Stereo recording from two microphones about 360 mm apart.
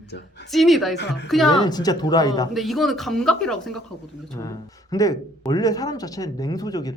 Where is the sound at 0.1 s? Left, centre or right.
Left.